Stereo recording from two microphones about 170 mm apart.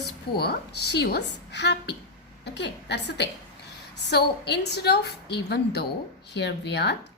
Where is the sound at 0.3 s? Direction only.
75° left (ahead or behind).